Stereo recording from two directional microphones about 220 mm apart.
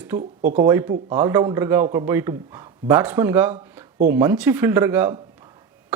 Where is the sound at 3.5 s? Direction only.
40° right (ahead or behind).